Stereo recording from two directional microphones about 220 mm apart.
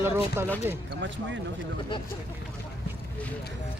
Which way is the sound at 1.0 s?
55° right (ahead or behind).